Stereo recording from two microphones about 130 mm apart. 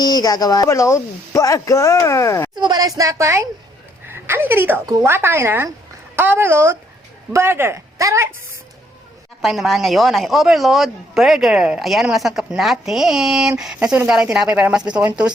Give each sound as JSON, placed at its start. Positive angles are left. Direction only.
{"t": 0.0, "sound": "speech", "side_deg": 30}
{"t": 2.6, "sound": "speech", "side_deg": -30}
{"t": 9.4, "sound": "speech", "side_deg": 0}